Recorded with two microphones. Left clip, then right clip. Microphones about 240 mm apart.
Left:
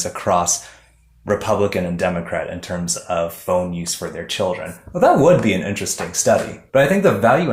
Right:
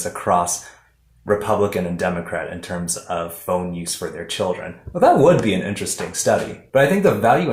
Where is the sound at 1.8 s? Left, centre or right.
Left.